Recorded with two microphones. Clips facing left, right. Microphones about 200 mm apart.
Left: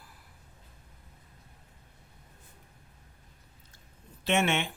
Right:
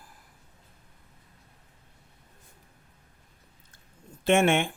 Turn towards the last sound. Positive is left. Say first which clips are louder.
# right 6 dB
turn(degrees=-50)  # may be behind; listen again after turning